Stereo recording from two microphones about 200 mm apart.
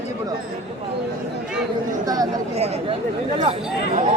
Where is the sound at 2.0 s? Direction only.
20° right (ahead or behind).